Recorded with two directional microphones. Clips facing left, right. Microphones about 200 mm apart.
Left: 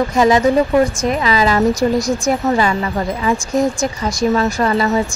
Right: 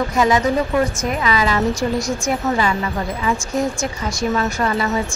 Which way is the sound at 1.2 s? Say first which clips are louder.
Left 4 dB; 35° left (ahead or behind).